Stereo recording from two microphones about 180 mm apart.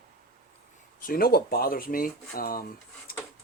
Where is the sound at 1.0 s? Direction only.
55° left (ahead or behind).